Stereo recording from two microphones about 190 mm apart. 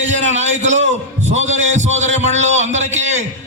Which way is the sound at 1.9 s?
35° right (ahead or behind).